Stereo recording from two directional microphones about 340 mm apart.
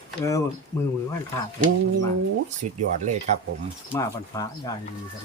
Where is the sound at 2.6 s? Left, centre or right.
Right.